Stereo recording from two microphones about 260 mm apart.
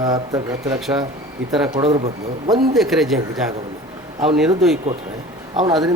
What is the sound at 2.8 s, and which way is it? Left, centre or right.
Speech, centre.